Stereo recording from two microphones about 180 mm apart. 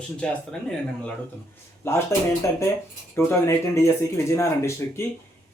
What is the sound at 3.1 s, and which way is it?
Speech, 15° left (ahead or behind).